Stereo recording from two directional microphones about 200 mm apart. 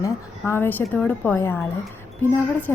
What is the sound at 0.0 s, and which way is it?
A woman's voice, 10° left (ahead or behind).